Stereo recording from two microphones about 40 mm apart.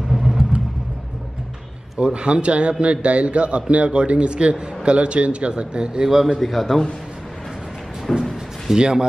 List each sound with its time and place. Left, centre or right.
0.1 s vehicle: centre
2.0 s a man's voice: right
6.0 s a man's voice: centre
6.4 s a man's voice: centre
8.1 s speech: centre
8.7 s a man's voice: centre